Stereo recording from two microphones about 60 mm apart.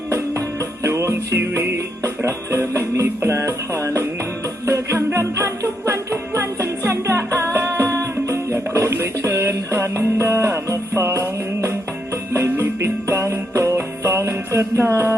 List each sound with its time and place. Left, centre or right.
0.8 s music: right